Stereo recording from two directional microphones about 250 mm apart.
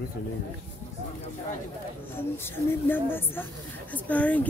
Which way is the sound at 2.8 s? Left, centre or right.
Centre.